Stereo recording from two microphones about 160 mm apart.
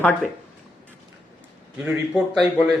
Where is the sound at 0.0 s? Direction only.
10° left (ahead or behind).